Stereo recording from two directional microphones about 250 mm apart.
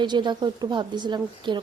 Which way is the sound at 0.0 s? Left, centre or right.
Centre.